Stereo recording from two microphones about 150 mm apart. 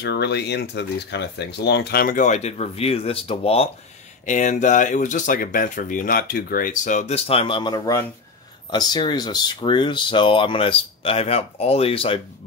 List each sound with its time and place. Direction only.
0.2 s speech: 90° left; by 3.7 s 40° left (ahead or behind)
4.3 s speech: 55° left (ahead or behind); by 12.2 s 35° left (ahead or behind)